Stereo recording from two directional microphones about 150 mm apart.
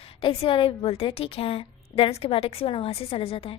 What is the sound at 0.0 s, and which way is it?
A woman's voice, 40° left (ahead or behind).